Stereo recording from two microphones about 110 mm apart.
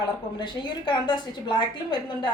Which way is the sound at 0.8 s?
45° left (ahead or behind).